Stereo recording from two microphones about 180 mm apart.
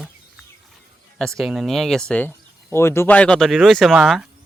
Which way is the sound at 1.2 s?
Centre (ahead or behind).